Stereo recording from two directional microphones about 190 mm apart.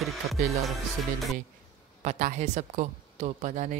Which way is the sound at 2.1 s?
40° right (ahead or behind).